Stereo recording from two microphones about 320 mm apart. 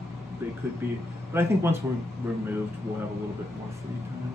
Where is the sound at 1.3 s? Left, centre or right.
Centre.